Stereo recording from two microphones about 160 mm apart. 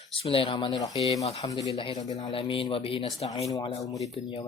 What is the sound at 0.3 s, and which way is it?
Speech, 35° left (ahead or behind).